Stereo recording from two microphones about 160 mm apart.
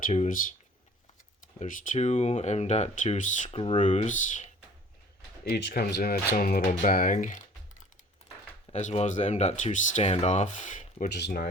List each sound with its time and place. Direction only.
0.0 s speech: 50° left (ahead or behind)
1.6 s speech: 55° left (ahead or behind)
3.5 s speech: 35° left (ahead or behind)
3.8 s speech: 50° left (ahead or behind)
5.5 s speech: 85° left; by 7.4 s 55° left (ahead or behind)
8.7 s speech: 45° left (ahead or behind)
11.1 s speech: 80° left